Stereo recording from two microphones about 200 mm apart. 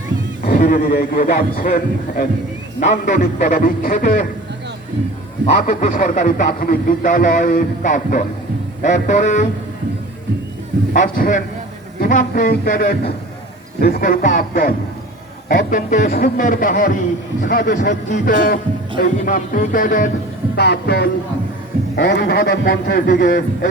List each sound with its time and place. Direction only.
0.4 s a man's voice: 45° left (ahead or behind)
5.6 s speech: 40° left (ahead or behind)
11.0 s a man's voice: 40° left (ahead or behind)
20.6 s a man's voice: 55° left (ahead or behind)